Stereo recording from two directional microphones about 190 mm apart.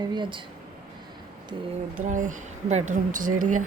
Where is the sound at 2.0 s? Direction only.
40° right (ahead or behind).